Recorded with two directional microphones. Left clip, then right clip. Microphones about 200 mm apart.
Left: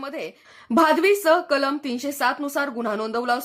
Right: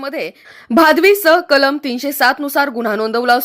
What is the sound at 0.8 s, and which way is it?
A woman's voice, 25° right (ahead or behind).